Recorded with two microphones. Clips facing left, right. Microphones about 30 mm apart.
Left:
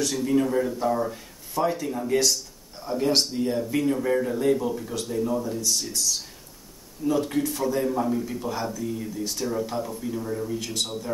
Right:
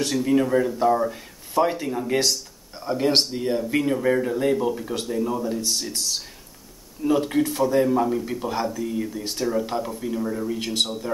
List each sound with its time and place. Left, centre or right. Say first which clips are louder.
0.1 s speech: right 3 dB; centre